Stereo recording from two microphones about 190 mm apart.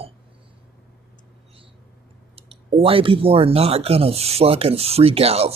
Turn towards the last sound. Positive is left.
turn(degrees=-30)  # may be behind; listen again after turning